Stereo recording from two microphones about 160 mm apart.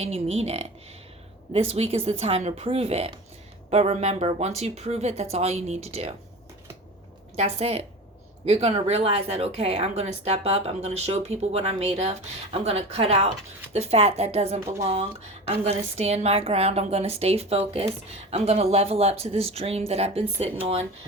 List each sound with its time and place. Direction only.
0.0 s speech: 40° right (ahead or behind)
7.3 s speech: 40° right (ahead or behind)